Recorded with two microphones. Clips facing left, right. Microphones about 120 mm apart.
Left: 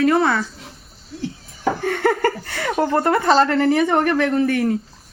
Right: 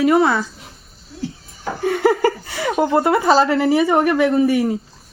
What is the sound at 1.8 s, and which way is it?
Speech, 5° right (ahead or behind).